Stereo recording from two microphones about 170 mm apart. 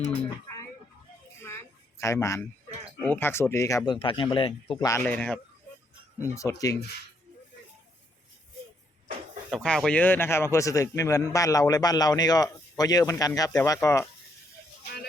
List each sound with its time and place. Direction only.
1.4 s a sound: 15° left (ahead or behind)
3.0 s speech: 10° left (ahead or behind)
3.9 s a man's voice: 30° left (ahead or behind)
4.9 s speech: 10° left (ahead or behind)
6.2 s a man's voice: 20° left (ahead or behind)
9.5 s a man's voice: 5° left (ahead or behind)